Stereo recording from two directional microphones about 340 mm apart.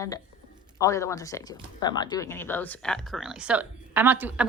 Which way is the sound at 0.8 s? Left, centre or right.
Centre.